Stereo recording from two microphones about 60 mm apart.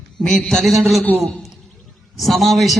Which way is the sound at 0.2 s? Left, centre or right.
Centre.